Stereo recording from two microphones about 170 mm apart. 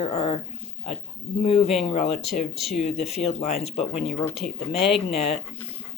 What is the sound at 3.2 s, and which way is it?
Speech, 40° left (ahead or behind).